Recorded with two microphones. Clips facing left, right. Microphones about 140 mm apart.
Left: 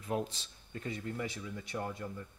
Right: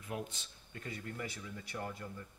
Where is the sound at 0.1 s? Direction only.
35° left (ahead or behind).